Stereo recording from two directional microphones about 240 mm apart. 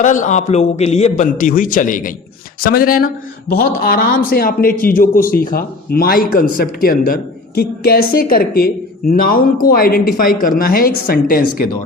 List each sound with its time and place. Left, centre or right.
0.0 s a man's voice: left